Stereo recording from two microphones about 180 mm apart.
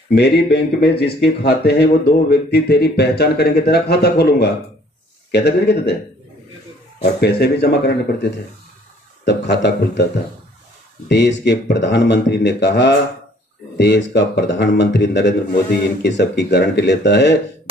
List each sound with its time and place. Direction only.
0.1 s speech: 70° left (ahead or behind)
7.2 s a man's voice: 65° left (ahead or behind)
11.1 s a man's voice: 75° left (ahead or behind)